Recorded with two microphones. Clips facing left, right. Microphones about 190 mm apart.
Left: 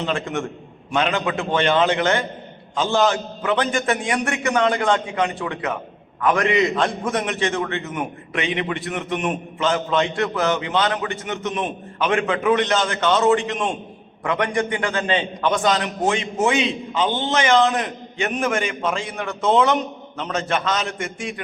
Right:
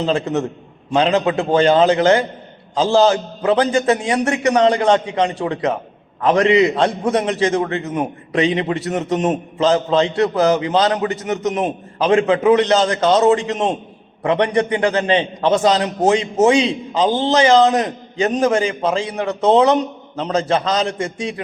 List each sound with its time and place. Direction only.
0.0 s a man's voice: 35° right (ahead or behind)